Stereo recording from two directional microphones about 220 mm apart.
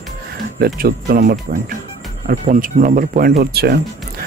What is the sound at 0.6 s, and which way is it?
Speech, 45° right (ahead or behind).